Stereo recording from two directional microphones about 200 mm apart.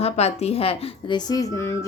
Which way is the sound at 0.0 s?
30° left (ahead or behind).